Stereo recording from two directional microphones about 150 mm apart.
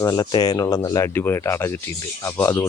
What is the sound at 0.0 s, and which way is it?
Speech, 25° left (ahead or behind).